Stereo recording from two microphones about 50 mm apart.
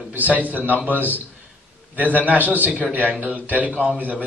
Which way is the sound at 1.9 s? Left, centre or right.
Right.